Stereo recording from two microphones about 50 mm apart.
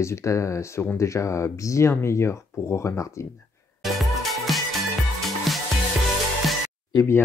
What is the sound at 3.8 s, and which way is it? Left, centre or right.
Music, centre.